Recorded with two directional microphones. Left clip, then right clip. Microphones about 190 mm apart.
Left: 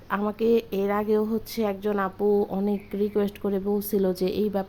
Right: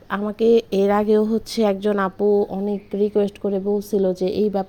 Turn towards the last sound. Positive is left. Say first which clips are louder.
# right 5 dB
turn(degrees=-15)  # may be behind; listen again after turning